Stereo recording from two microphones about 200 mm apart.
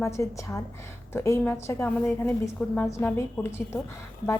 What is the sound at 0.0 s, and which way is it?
A woman's voice, 15° left (ahead or behind).